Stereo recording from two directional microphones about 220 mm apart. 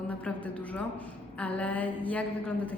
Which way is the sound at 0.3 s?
5° left (ahead or behind).